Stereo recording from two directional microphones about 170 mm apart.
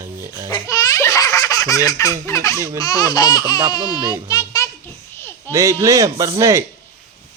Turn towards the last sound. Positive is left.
turn(degrees=-15)  # may be behind; listen again after turning